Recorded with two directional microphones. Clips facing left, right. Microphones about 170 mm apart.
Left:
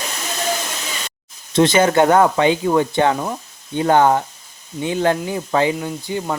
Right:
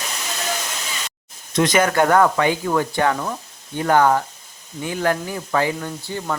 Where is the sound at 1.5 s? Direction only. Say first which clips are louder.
Left 3 dB; 25° left (ahead or behind).